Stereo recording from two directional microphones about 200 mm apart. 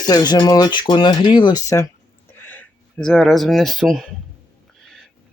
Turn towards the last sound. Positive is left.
turn(degrees=0)  # may be behind; listen again after turning